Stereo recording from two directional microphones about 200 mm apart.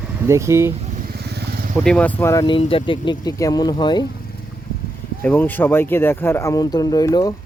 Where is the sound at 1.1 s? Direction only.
55° right (ahead or behind).